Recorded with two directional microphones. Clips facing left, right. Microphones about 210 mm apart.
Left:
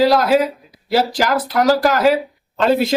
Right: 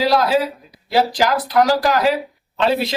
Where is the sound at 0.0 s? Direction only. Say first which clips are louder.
Left 3 dB; 45° left (ahead or behind).